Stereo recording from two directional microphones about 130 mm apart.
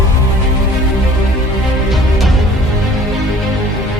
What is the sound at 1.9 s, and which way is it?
Music, centre (ahead or behind).